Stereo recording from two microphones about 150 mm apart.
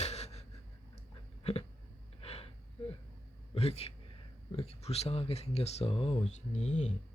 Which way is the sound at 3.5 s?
40° left (ahead or behind).